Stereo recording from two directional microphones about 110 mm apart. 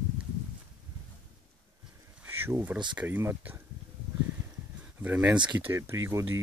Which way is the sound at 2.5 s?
20° right (ahead or behind).